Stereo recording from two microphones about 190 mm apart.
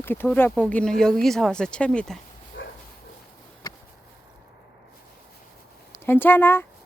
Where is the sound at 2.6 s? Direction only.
80° left.